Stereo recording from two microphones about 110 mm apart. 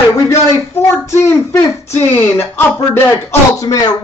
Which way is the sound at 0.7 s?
25° left (ahead or behind).